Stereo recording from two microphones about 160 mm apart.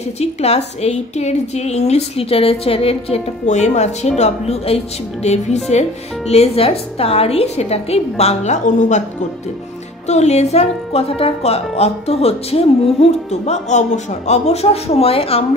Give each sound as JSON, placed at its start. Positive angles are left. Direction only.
{"t": 0.2, "sound": "a woman's voice", "side_deg": 40}
{"t": 10.0, "sound": "a woman's voice", "side_deg": 45}